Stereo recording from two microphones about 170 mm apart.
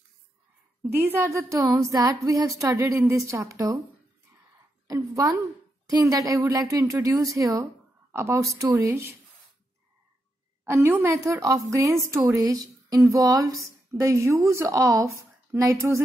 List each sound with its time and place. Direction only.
0.9 s a woman's voice: 15° right (ahead or behind)
4.8 s a woman's voice: 20° right (ahead or behind)
10.6 s a woman's voice: 15° right (ahead or behind)